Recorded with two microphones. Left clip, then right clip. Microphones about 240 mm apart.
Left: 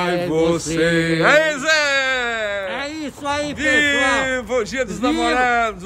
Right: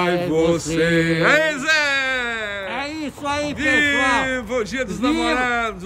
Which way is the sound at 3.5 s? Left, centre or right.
Centre.